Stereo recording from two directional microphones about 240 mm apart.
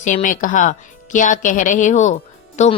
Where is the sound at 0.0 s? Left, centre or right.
Left.